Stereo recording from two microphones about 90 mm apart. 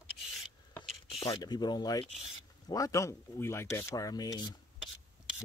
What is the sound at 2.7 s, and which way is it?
Rub, 40° left (ahead or behind).